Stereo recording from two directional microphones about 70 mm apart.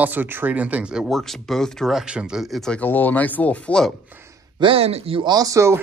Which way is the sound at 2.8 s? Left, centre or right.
Left.